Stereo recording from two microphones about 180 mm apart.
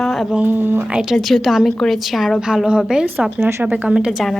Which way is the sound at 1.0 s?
Centre (ahead or behind).